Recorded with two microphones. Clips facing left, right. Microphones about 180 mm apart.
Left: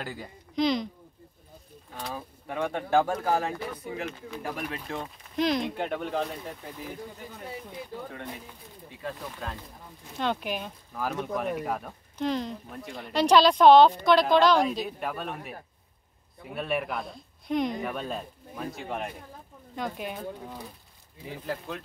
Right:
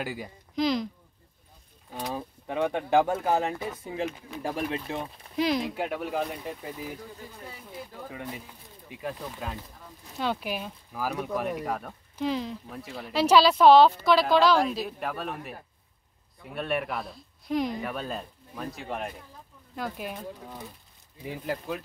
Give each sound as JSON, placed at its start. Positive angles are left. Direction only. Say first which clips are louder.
{"t": 0.0, "sound": "speech", "louder": "right 3 dB", "side_deg": -10}
{"t": 2.1, "sound": "speech", "louder": "right 3 dB", "side_deg": -20}
{"t": 5.3, "sound": "speech", "louder": "even", "side_deg": -5}
{"t": 9.0, "sound": "speech", "louder": "right 1 dB", "side_deg": -10}
{"t": 21.5, "sound": "speech", "louder": "right 2 dB", "side_deg": -5}